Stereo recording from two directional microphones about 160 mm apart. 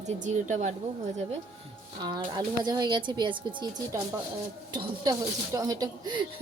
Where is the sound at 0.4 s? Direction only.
50° right (ahead or behind).